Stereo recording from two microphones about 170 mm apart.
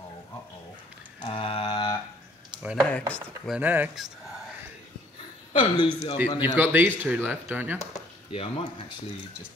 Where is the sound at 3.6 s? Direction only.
10° right (ahead or behind).